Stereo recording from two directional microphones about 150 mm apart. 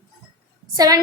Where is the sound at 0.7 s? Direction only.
25° right (ahead or behind).